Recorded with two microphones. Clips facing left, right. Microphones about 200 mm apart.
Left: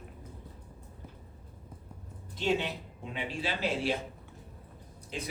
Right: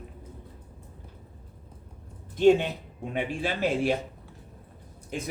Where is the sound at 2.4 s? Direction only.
50° right (ahead or behind).